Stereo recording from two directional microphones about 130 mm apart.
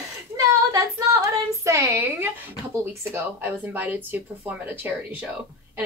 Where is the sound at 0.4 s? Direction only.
25° right (ahead or behind).